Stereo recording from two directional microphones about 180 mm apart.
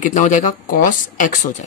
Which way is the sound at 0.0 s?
45° left (ahead or behind).